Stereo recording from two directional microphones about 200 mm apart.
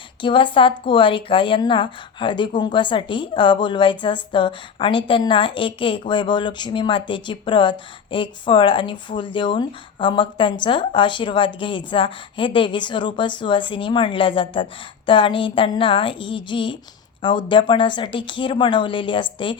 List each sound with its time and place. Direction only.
0.2 s speech: 25° left (ahead or behind)